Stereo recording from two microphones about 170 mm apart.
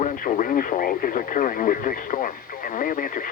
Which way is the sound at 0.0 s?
50° left (ahead or behind).